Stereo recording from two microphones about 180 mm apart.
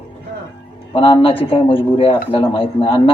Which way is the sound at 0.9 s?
30° left (ahead or behind).